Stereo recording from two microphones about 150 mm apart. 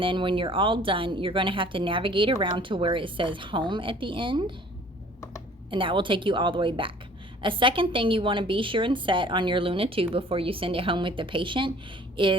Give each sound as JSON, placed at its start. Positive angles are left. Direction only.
{"t": 0.0, "sound": "speech", "side_deg": -35}
{"t": 5.7, "sound": "speech", "side_deg": -35}